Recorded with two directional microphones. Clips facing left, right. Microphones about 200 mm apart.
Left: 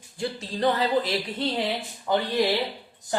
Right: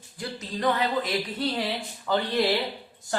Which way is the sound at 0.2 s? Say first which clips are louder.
Left 3 dB; 30° left (ahead or behind).